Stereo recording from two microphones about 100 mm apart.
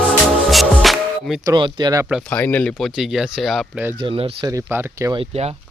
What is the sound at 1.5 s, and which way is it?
Speech, 50° right (ahead or behind).